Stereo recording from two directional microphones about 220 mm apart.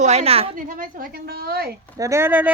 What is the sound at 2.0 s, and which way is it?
Speech, 10° right (ahead or behind).